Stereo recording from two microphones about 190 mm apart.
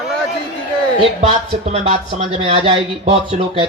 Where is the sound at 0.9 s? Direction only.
30° right (ahead or behind).